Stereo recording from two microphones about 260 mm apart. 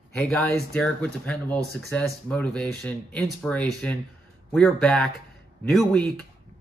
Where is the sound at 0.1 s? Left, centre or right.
Centre.